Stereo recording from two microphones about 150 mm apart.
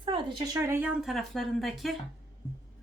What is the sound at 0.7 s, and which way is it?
Speech, 10° right (ahead or behind).